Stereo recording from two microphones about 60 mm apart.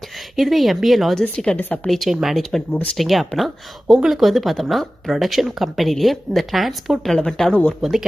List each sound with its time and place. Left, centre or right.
0.3 s speech: centre
1.5 s a woman's voice: left
1.9 s speech: centre
7.8 s speech: centre